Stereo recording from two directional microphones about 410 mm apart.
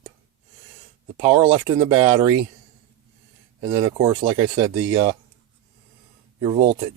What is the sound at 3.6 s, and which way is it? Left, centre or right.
Speech, centre.